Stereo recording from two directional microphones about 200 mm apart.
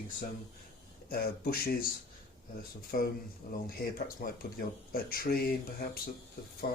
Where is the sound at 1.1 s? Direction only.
50° left (ahead or behind).